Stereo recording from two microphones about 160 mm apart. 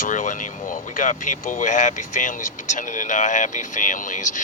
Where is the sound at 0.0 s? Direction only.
55° left (ahead or behind).